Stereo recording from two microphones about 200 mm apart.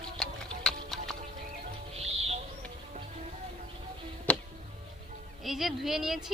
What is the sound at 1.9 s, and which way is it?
Music, 30° right (ahead or behind).